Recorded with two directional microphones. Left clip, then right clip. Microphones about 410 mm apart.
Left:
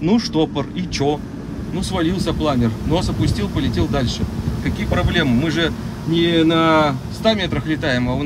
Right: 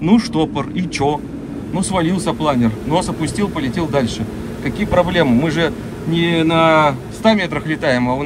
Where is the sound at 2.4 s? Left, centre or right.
Centre.